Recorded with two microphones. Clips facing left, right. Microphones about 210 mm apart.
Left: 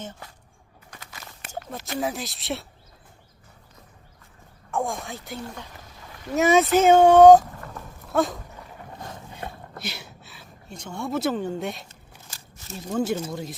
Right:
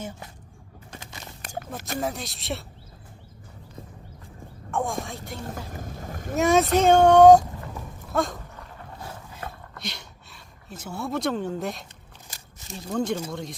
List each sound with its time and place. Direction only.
0.0 s speech: 10° right (ahead or behind)
0.9 s crunch: 25° right (ahead or behind)
2.0 s speech: centre (ahead or behind)
4.7 s speech: centre (ahead or behind)
5.7 s boat: 50° right (ahead or behind)
6.3 s speech: centre (ahead or behind)
8.0 s dog: centre (ahead or behind)
9.5 s a sound: 5° left (ahead or behind)
12.9 s speech: 5° left (ahead or behind)